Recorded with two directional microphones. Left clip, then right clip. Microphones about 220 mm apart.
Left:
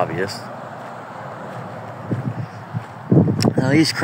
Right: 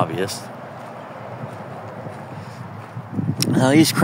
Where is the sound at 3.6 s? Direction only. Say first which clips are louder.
Right 4 dB; 15° right (ahead or behind).